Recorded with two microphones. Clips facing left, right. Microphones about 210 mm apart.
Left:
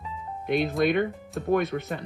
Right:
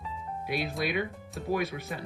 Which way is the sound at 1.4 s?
55° left (ahead or behind).